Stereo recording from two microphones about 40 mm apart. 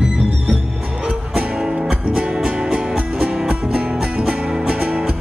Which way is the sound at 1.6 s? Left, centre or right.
Centre.